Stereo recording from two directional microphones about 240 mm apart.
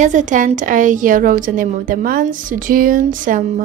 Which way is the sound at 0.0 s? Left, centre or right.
Right.